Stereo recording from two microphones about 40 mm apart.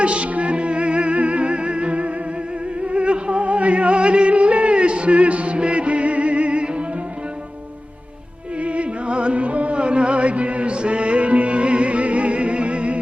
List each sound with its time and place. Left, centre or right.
0.0 s music: right
8.6 s music: right